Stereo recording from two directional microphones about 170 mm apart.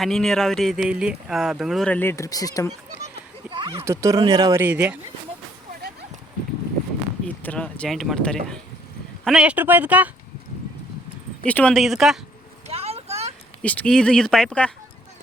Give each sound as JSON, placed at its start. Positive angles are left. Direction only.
{"t": 0.0, "sound": "speech", "side_deg": 0}
{"t": 3.5, "sound": "a sound", "side_deg": -30}
{"t": 3.8, "sound": "speech", "side_deg": -15}
{"t": 7.3, "sound": "speech", "side_deg": 10}
{"t": 11.4, "sound": "speech", "side_deg": 10}
{"t": 12.6, "sound": "vehicle", "side_deg": -35}
{"t": 13.6, "sound": "speech", "side_deg": 5}